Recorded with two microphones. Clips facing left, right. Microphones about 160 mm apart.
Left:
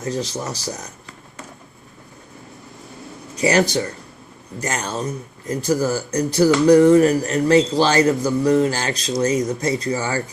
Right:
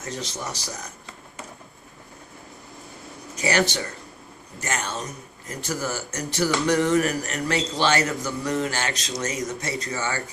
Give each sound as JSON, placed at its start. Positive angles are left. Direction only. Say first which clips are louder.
{"t": 0.0, "sound": "speech", "louder": "left 7 dB", "side_deg": 35}
{"t": 3.3, "sound": "speech", "louder": "left 6 dB", "side_deg": 35}